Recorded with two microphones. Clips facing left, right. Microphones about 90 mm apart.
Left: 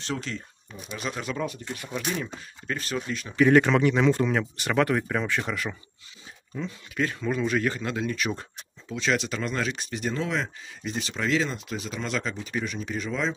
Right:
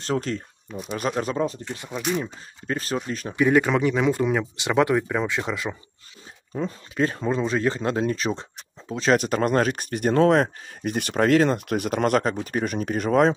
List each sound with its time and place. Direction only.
0.0 s speech: 45° right (ahead or behind)
3.3 s speech: 10° right (ahead or behind)
6.5 s speech: 35° right (ahead or behind); by 13.3 s 55° right (ahead or behind)